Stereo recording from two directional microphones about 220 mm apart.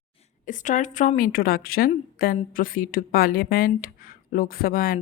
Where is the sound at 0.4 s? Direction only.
35° left (ahead or behind).